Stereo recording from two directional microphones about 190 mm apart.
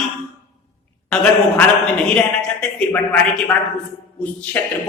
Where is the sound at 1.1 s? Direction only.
5° left (ahead or behind).